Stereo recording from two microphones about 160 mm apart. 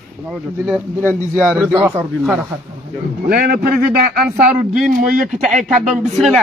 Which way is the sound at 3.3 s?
75° right (ahead or behind).